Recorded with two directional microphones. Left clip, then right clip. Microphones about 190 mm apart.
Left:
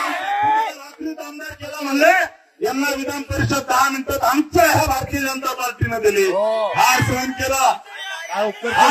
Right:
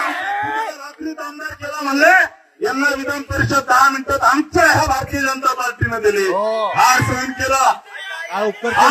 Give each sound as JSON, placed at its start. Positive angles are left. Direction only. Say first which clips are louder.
{"t": 0.3, "sound": "a sound", "louder": "left 3 dB", "side_deg": -40}
{"t": 1.0, "sound": "a sound", "louder": "right 3 dB", "side_deg": 15}
{"t": 2.1, "sound": "a man's voice", "louder": "right 5 dB", "side_deg": 15}
{"t": 6.4, "sound": "speech", "louder": "even", "side_deg": -50}
{"t": 6.7, "sound": "a man's voice", "louder": "right 5 dB", "side_deg": 15}
{"t": 8.3, "sound": "speech", "louder": "right 1 dB", "side_deg": -45}